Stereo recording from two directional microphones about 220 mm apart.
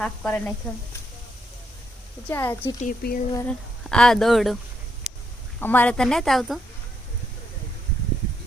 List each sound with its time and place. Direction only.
0.0 s speech: 5° left (ahead or behind)
2.3 s speech: 10° left (ahead or behind)
2.8 s speech: 40° left (ahead or behind)
3.3 s speech: 5° left (ahead or behind)
5.5 s speech: 10° left (ahead or behind)